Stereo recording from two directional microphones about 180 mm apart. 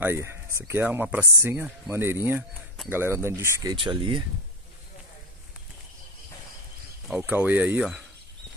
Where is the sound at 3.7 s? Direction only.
30° right (ahead or behind).